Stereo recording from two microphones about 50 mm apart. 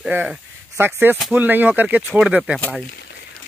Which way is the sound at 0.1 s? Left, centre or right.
Right.